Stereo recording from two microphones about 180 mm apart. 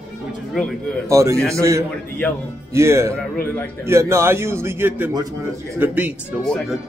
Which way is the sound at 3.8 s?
15° right (ahead or behind).